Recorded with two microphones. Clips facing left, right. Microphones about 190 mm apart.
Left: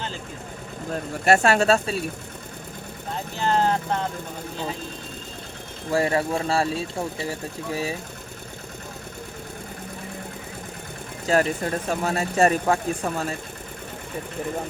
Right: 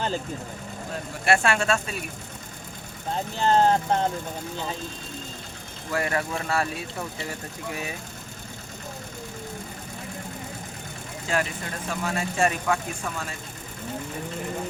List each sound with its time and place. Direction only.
1.2 s speech: 40° left (ahead or behind)
3.4 s speech: 35° right (ahead or behind)
5.9 s speech: 30° left (ahead or behind)
11.3 s speech: 40° left (ahead or behind)